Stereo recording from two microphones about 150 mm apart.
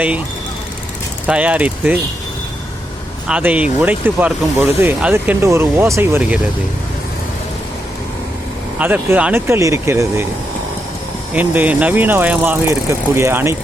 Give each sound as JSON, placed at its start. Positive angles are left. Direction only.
{"t": 1.3, "sound": "speech", "side_deg": -10}
{"t": 3.2, "sound": "speech", "side_deg": -10}
{"t": 8.8, "sound": "speech", "side_deg": -10}
{"t": 11.3, "sound": "speech", "side_deg": -10}